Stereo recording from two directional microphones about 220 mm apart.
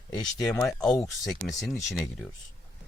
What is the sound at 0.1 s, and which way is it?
Speech, 20° left (ahead or behind).